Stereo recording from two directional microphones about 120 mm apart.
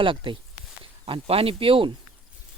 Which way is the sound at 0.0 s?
45° right (ahead or behind).